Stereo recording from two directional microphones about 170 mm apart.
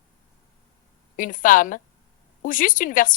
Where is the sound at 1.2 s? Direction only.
50° left (ahead or behind).